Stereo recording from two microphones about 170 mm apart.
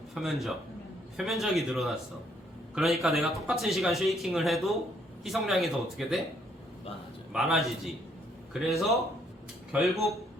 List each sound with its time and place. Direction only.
0.1 s a man's voice: centre (ahead or behind)
7.3 s speech: centre (ahead or behind)